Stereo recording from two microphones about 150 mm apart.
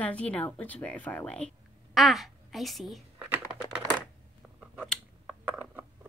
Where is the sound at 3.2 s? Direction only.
10° right (ahead or behind).